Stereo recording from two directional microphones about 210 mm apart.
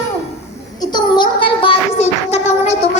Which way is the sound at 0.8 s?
20° left (ahead or behind).